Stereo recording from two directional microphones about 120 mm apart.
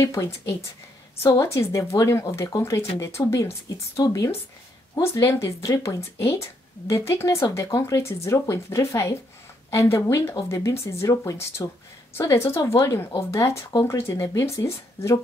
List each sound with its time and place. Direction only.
0.0 s speech: 25° left (ahead or behind)